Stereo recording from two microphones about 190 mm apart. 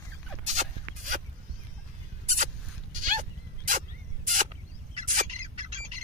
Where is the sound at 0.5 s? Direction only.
40° right (ahead or behind).